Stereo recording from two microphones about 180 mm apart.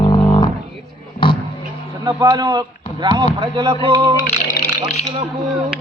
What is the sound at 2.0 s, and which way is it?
Speech, 20° right (ahead or behind).